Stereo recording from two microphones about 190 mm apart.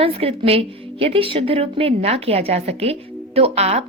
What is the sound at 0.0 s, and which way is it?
A woman's voice, 30° right (ahead or behind).